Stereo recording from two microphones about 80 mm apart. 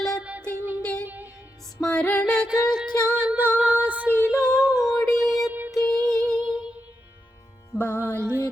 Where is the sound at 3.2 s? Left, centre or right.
Centre.